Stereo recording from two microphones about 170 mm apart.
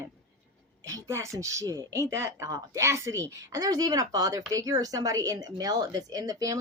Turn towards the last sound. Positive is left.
turn(degrees=-20)  # may be behind; listen again after turning